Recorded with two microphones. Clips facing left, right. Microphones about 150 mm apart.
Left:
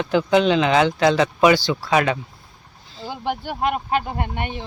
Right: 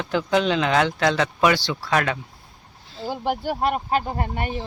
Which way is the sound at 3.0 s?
Centre (ahead or behind).